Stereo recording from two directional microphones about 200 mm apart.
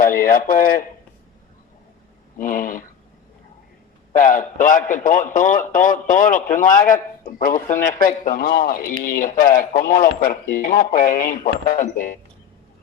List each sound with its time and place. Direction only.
0.0 s speech: 45° left (ahead or behind)
2.4 s speech: 40° left (ahead or behind)
4.2 s a man's voice: 40° left (ahead or behind)